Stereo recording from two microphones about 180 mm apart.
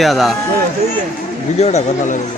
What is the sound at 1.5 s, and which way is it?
Speech, 40° left (ahead or behind).